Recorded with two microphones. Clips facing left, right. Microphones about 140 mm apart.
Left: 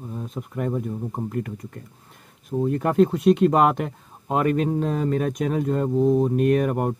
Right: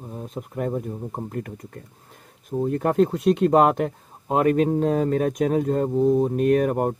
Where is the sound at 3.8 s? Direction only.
40° right (ahead or behind).